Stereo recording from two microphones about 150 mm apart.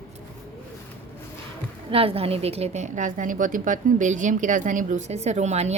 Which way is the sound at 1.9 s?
40° right (ahead or behind).